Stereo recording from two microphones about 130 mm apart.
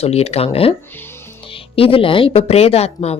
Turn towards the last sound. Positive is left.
turn(degrees=50)  # may be behind; listen again after turning